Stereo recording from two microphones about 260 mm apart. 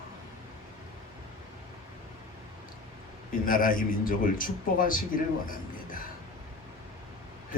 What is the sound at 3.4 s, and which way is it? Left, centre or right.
A man's voice, left.